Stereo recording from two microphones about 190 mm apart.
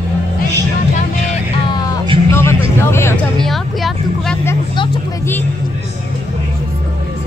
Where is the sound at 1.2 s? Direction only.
25° left (ahead or behind).